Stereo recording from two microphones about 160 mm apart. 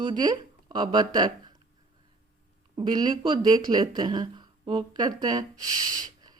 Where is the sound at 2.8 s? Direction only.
30° right (ahead or behind).